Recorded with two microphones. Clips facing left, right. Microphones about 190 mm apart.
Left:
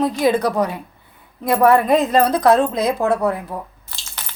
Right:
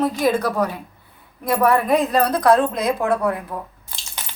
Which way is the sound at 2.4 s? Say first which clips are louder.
Left 1 dB; 25° left (ahead or behind).